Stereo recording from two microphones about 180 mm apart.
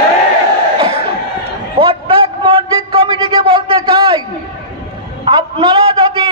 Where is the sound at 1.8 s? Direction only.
30° right (ahead or behind).